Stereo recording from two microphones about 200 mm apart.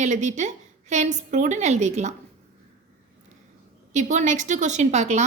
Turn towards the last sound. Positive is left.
turn(degrees=-35)  # may be behind; listen again after turning